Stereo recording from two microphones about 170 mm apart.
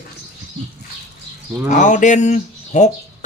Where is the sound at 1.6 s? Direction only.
50° left (ahead or behind).